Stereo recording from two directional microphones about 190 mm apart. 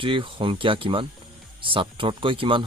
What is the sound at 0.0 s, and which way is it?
Speech, 25° right (ahead or behind).